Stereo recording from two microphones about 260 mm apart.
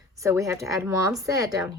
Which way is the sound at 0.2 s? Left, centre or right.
Centre.